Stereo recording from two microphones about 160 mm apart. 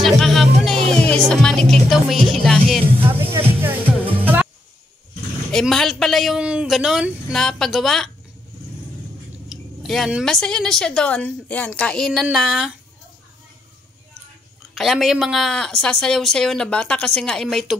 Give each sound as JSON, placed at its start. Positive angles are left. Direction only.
{"t": 0.0, "sound": "music", "side_deg": 0}
{"t": 3.1, "sound": "speech", "side_deg": -15}
{"t": 3.6, "sound": "music", "side_deg": -10}
{"t": 5.5, "sound": "a woman's voice", "side_deg": 5}
{"t": 9.5, "sound": "a woman's voice", "side_deg": 0}
{"t": 14.7, "sound": "a woman's voice", "side_deg": 0}